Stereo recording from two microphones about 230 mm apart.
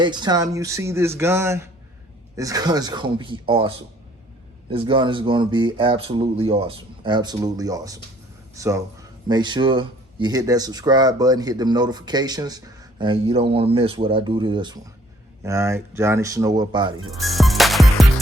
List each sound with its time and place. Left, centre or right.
0.0 s speech: centre
4.7 s speech: right
17.1 s music: centre